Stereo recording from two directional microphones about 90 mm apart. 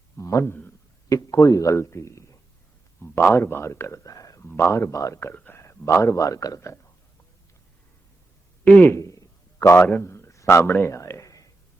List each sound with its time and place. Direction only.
0.2 s a man's voice: 35° left (ahead or behind)
4.4 s a man's voice: 30° left (ahead or behind)
5.3 s speech: 20° left (ahead or behind)
5.6 s a man's voice: 35° left (ahead or behind)
8.6 s a man's voice: 20° left (ahead or behind)
9.0 s a sound: 35° left (ahead or behind)
9.8 s a man's voice: 30° left (ahead or behind)
10.8 s a sound: 30° left (ahead or behind)